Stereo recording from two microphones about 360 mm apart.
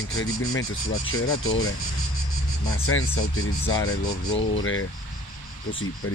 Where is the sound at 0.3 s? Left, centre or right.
Left.